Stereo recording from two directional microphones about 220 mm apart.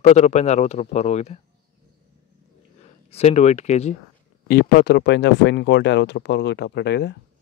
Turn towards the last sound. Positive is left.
turn(degrees=50)  # may be behind; listen again after turning